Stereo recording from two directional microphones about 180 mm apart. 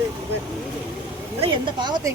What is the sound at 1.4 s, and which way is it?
Speech, 25° right (ahead or behind).